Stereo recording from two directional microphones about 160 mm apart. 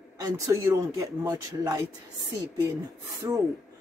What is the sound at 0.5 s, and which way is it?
Speech, 20° right (ahead or behind).